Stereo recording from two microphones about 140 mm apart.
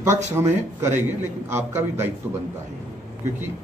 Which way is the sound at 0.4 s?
20° right (ahead or behind).